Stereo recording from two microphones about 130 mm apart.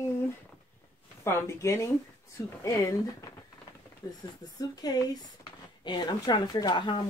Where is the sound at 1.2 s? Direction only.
20° left (ahead or behind).